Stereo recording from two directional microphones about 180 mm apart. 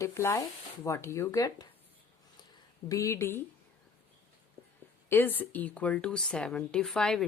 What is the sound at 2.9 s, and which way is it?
Speech, 15° left (ahead or behind).